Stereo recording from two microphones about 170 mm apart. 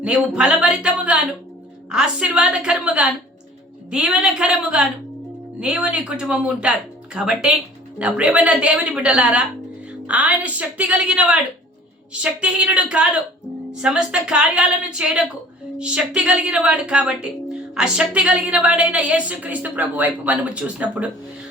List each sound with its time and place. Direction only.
0.0 s speech: 5° right (ahead or behind)